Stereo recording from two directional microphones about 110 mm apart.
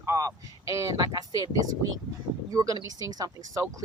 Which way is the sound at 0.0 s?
30° right (ahead or behind).